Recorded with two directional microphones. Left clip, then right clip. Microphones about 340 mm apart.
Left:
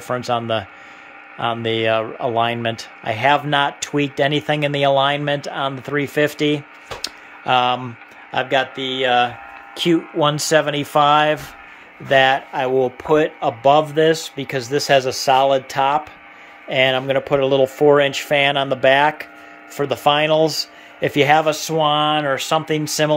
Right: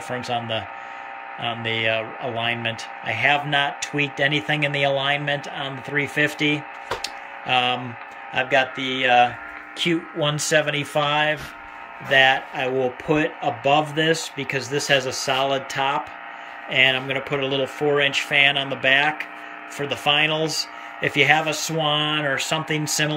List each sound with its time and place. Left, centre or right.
0.1 s speech: centre
10.5 s speech: centre
14.6 s speech: left
15.2 s speech: centre